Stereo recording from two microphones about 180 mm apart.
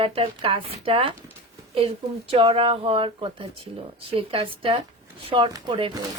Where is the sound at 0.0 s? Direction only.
30° right (ahead or behind).